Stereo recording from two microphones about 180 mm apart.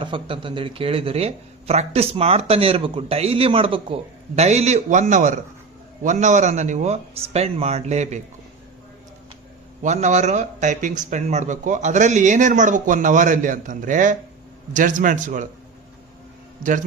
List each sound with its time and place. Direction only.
0.0 s speech: 30° right (ahead or behind)
9.8 s speech: 40° right (ahead or behind)